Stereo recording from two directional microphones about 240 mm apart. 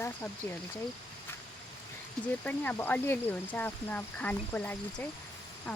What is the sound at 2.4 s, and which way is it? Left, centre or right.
Speech, centre.